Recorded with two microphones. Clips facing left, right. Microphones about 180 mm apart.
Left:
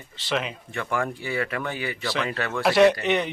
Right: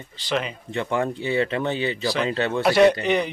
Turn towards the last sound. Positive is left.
turn(degrees=0)  # may be behind; listen again after turning